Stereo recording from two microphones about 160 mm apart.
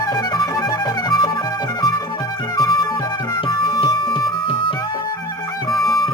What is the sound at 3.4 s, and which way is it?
Music, 30° left (ahead or behind).